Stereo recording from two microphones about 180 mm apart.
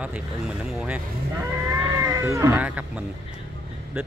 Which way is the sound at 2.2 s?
15° right (ahead or behind).